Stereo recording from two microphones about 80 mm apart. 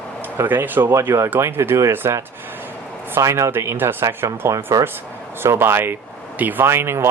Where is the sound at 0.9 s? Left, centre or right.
Right.